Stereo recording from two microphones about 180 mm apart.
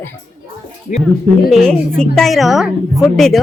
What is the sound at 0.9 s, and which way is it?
Speech, 50° left (ahead or behind).